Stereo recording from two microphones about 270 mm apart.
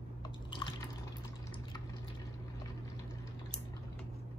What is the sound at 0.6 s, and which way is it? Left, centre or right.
Drip, centre.